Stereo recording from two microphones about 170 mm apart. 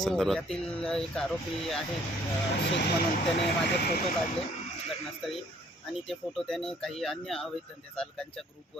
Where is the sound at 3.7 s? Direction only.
70° left (ahead or behind).